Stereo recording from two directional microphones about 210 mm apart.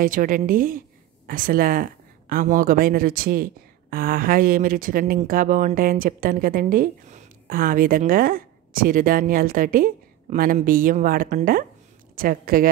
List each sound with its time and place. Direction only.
0.0 s speech: 40° right (ahead or behind)